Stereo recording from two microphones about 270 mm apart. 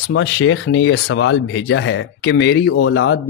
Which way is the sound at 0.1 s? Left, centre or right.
Left.